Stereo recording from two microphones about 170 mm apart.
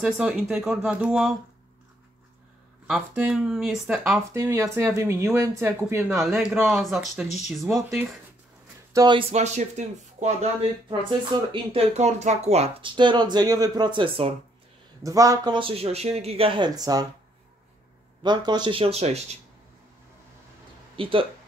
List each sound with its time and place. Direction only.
0.0 s speech: 5° right (ahead or behind)
2.9 s speech: 5° right (ahead or behind)
4.3 s speech: 15° right (ahead or behind)
6.2 s speech: centre (ahead or behind)
8.9 s speech: 25° right (ahead or behind)
9.3 s speech: 40° right (ahead or behind)
10.9 s speech: 30° right (ahead or behind)
15.0 s speech: 20° right (ahead or behind)
18.2 s speech: 25° right (ahead or behind)
20.9 s speech: 30° right (ahead or behind)